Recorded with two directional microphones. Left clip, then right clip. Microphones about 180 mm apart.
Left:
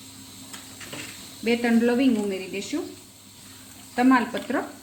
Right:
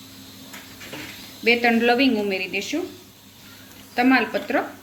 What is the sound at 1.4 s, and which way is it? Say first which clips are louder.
Speech: right 5 dB; 40° left (ahead or behind).